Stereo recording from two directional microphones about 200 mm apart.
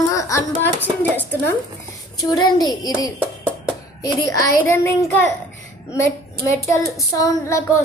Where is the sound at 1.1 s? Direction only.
10° left (ahead or behind).